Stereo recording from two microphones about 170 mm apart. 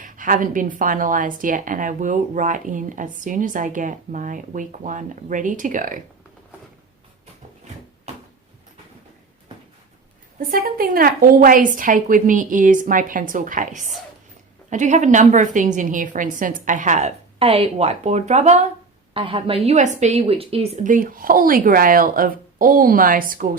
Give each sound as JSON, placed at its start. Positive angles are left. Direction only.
{"t": 0.0, "sound": "a woman's voice", "side_deg": -50}
{"t": 10.4, "sound": "a woman's voice", "side_deg": -60}
{"t": 19.1, "sound": "a woman's voice", "side_deg": -30}